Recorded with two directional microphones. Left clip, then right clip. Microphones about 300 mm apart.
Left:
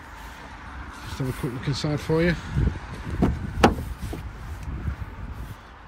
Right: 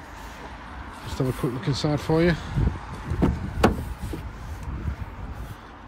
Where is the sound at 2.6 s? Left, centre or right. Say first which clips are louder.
Right 1 dB; right.